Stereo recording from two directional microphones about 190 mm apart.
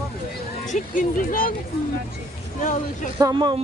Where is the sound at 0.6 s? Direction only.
40° left (ahead or behind).